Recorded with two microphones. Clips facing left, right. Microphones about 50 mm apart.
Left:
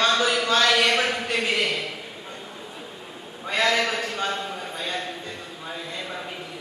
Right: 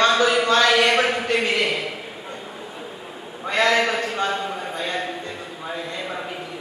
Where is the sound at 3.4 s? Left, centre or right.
Centre.